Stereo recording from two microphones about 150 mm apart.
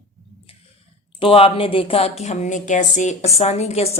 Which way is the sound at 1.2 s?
40° left (ahead or behind).